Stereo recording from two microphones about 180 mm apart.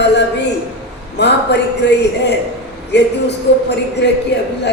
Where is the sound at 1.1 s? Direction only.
70° left (ahead or behind).